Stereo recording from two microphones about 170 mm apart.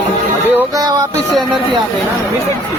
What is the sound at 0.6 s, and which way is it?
Music, 20° right (ahead or behind).